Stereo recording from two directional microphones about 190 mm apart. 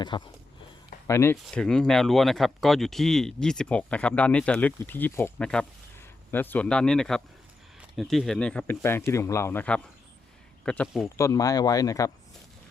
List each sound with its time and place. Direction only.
0.1 s speech: 25° left (ahead or behind)
1.0 s speech: 15° left (ahead or behind)
11.2 s speech: 20° left (ahead or behind)